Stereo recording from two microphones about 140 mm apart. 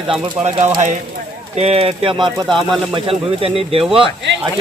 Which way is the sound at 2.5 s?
Centre (ahead or behind).